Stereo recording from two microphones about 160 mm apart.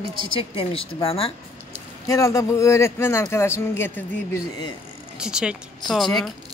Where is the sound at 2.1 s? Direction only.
20° left (ahead or behind).